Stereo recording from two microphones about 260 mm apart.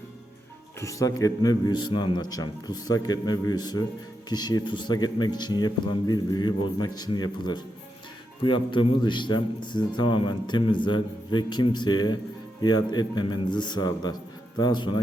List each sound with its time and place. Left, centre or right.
0.8 s a man's voice: centre